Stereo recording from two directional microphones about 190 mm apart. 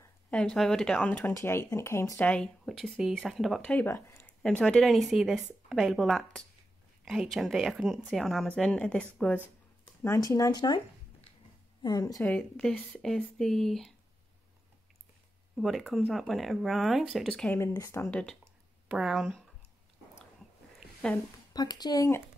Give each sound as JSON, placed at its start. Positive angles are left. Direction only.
{"t": 0.3, "sound": "speech", "side_deg": 5}
{"t": 10.0, "sound": "speech", "side_deg": 15}
{"t": 12.3, "sound": "speech", "side_deg": 5}
{"t": 15.5, "sound": "speech", "side_deg": 0}
{"t": 18.4, "sound": "a sound", "side_deg": -5}
{"t": 20.8, "sound": "a sound", "side_deg": 5}
{"t": 21.5, "sound": "speech", "side_deg": 20}